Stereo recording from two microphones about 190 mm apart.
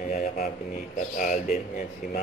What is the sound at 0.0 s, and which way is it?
A man's voice, 45° left (ahead or behind).